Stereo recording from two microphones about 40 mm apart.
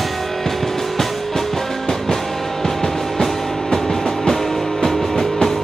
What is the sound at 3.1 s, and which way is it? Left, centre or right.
Music, centre.